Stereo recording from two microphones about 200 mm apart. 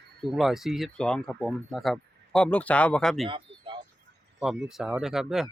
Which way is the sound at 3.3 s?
25° right (ahead or behind).